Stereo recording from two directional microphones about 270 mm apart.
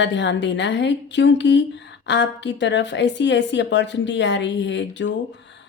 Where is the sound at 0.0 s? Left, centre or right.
Left.